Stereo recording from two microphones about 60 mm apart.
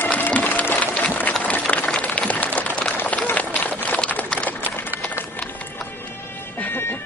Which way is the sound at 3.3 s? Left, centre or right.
Left.